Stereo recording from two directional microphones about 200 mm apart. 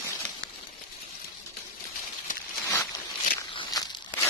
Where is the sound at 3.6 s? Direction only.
20° left (ahead or behind).